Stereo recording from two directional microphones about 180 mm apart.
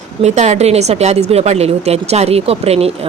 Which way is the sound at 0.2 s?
40° right (ahead or behind).